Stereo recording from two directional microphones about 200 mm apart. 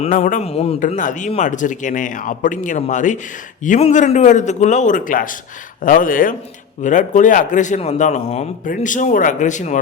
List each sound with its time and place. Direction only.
0.0 s a man's voice: 35° left (ahead or behind)